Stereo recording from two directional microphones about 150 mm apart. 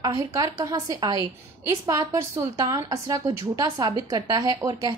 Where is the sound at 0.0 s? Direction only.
20° right (ahead or behind).